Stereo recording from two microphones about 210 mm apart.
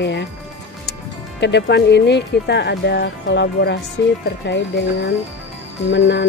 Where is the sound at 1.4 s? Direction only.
55° left (ahead or behind).